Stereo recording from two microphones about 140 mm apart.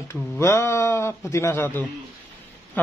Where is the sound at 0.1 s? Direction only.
20° left (ahead or behind).